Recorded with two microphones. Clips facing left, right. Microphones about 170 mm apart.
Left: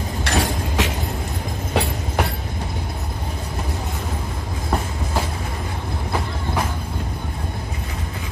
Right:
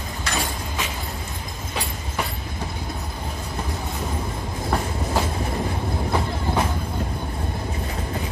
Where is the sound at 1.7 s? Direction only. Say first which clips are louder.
Left 8 dB; 65° left (ahead or behind).